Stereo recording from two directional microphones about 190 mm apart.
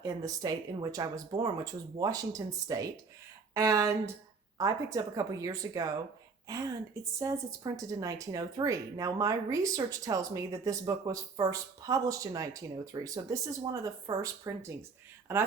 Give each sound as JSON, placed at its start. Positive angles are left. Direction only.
{"t": 0.0, "sound": "speech", "side_deg": -20}
{"t": 7.2, "sound": "speech", "side_deg": -15}